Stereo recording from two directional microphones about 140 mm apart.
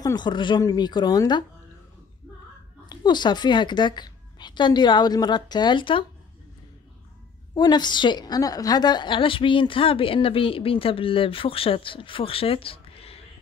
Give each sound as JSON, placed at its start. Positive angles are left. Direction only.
{"t": 0.0, "sound": "a woman's voice", "side_deg": 30}
{"t": 2.9, "sound": "a woman's voice", "side_deg": 30}
{"t": 7.5, "sound": "a woman's voice", "side_deg": 30}